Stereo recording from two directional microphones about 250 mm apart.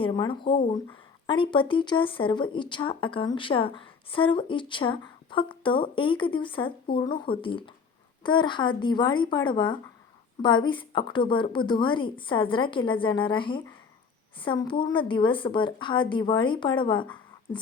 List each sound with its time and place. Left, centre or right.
0.0 s speech: centre